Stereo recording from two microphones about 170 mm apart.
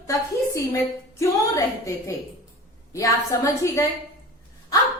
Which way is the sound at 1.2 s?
15° left (ahead or behind).